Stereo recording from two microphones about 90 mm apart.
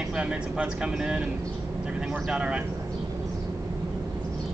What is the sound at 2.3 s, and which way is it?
Speech, 10° right (ahead or behind).